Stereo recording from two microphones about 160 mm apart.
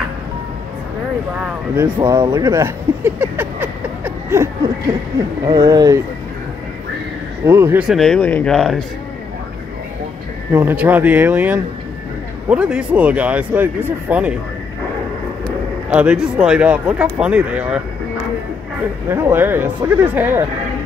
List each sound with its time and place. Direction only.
2.1 s speech: 25° right (ahead or behind)
5.5 s speech: 25° right (ahead or behind)
7.4 s speech: 15° right (ahead or behind)
7.8 s speech: centre (ahead or behind)
10.5 s speech: 15° right (ahead or behind)
15.9 s speech: 5° right (ahead or behind)
19.0 s speech: 15° right (ahead or behind)